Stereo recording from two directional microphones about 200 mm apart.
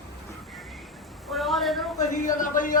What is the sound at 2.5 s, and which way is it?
Speech, 40° left (ahead or behind).